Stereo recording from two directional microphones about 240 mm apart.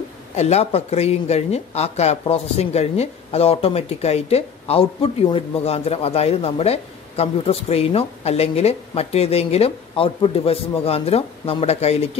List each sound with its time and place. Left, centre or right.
0.4 s speech: left